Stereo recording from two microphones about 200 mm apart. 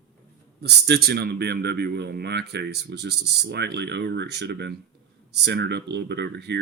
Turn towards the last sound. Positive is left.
turn(degrees=-60)  # may be behind; listen again after turning